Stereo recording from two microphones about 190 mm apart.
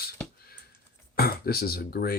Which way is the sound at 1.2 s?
55° left (ahead or behind).